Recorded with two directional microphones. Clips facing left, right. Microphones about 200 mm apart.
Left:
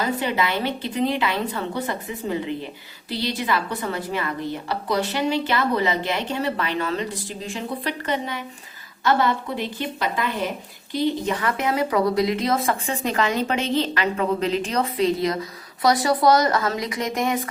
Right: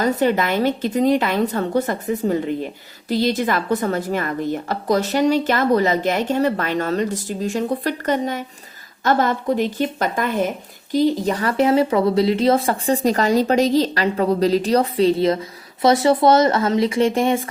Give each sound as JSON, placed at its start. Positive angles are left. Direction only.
{"t": 0.0, "sound": "a woman's voice", "side_deg": -45}